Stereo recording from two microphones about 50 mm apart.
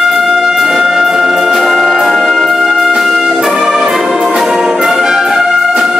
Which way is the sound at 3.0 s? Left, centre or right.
Centre.